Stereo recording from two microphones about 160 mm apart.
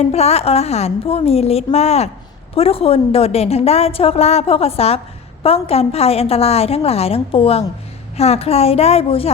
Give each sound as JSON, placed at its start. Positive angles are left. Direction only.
{"t": 0.0, "sound": "a woman's voice", "side_deg": 40}